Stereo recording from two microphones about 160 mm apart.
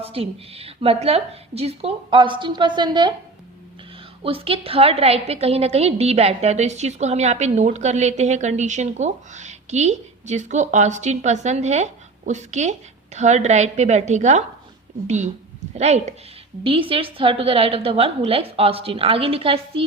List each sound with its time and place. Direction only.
0.0 s a woman's voice: 35° right (ahead or behind)
4.2 s a woman's voice: 35° right (ahead or behind)